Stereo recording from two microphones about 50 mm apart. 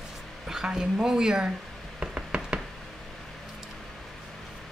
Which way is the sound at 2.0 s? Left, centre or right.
Right.